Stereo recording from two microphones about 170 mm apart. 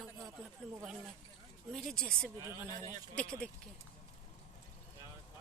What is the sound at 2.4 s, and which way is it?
Speech, 15° right (ahead or behind).